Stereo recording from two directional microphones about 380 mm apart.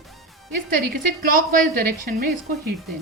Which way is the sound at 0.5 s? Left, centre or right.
Right.